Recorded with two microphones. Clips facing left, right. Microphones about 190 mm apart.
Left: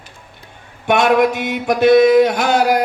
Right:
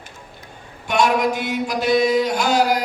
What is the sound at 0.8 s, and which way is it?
Mantra, 60° left (ahead or behind).